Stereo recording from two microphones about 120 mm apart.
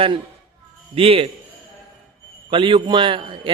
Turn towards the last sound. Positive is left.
turn(degrees=-45)  # may be behind; listen again after turning